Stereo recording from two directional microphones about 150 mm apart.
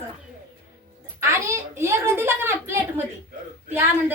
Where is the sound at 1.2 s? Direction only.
15° right (ahead or behind).